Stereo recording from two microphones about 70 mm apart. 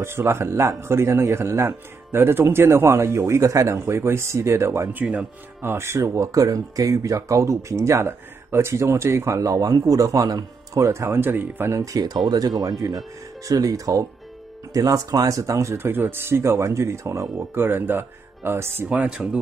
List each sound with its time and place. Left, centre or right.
0.0 s a man's voice: right
4.9 s speech: centre
5.6 s speech: right
10.9 s a man's voice: right
11.7 s a man's voice: right
18.9 s speech: centre